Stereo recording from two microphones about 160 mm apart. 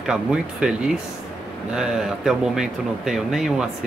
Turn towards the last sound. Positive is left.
turn(degrees=-5)  # may be behind; listen again after turning